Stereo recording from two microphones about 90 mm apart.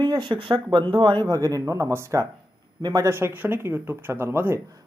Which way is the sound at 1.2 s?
40° right (ahead or behind).